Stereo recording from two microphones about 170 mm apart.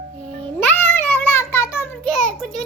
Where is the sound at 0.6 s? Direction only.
10° left (ahead or behind).